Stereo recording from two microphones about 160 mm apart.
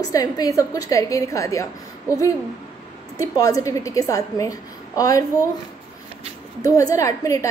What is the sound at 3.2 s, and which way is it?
A woman's voice, 20° left (ahead or behind).